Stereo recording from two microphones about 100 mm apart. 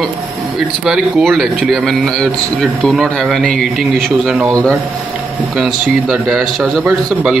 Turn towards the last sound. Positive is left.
turn(degrees=0)  # may be behind; listen again after turning